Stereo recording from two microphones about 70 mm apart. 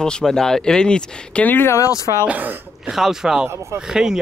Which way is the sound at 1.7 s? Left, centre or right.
Left.